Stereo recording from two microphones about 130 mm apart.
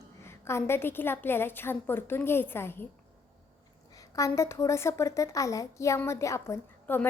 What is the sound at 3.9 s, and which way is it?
A woman's voice, 25° left (ahead or behind).